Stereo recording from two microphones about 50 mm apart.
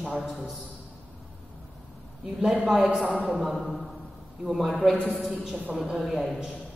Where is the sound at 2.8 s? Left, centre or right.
Right.